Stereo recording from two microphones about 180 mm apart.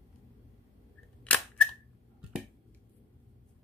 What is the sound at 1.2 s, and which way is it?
Cap gun, 5° left (ahead or behind).